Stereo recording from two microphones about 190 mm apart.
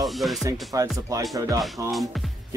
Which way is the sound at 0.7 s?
15° right (ahead or behind).